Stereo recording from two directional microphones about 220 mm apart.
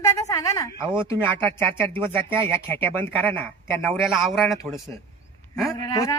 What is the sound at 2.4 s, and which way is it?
A woman's voice, 10° left (ahead or behind).